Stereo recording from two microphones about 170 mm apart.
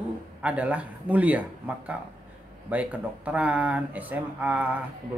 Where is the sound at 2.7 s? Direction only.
10° right (ahead or behind).